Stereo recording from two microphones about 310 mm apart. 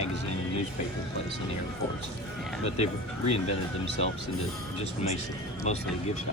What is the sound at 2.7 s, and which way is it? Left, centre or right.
Speech, centre.